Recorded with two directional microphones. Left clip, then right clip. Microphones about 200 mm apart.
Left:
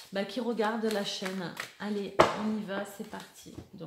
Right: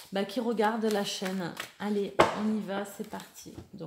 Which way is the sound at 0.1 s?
40° right (ahead or behind).